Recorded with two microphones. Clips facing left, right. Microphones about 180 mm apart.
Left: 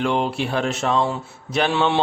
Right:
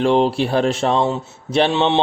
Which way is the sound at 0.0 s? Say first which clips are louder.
Right 6 dB; 35° right (ahead or behind).